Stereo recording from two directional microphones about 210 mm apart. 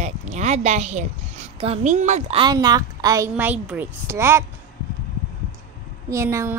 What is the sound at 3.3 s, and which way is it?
A woman's voice, 5° right (ahead or behind).